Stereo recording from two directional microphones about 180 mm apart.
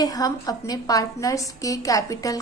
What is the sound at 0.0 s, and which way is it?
A woman's voice, 20° left (ahead or behind).